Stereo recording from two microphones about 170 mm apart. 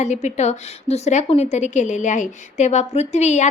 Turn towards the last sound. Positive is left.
turn(degrees=40)  # may be behind; listen again after turning